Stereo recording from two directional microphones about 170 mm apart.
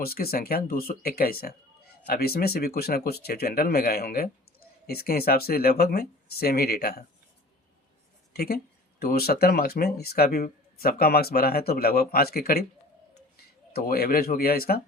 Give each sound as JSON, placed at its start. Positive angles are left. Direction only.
{"t": 0.0, "sound": "speech", "side_deg": 65}
{"t": 8.3, "sound": "speech", "side_deg": 65}
{"t": 13.7, "sound": "speech", "side_deg": 65}